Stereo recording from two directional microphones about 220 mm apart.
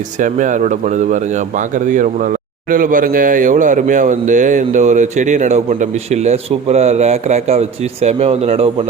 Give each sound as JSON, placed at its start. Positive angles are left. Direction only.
{"t": 0.2, "sound": "speech", "side_deg": -35}